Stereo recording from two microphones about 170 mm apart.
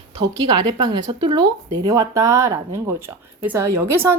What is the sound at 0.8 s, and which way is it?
Speech, 25° right (ahead or behind).